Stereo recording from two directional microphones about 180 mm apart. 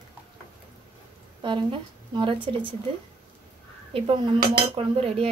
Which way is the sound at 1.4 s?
25° right (ahead or behind).